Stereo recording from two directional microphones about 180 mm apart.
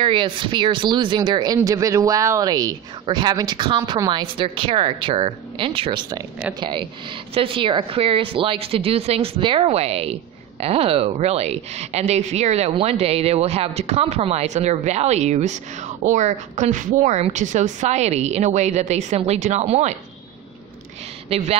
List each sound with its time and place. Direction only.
0.0 s speech: 25° right (ahead or behind)
21.3 s speech: 35° right (ahead or behind)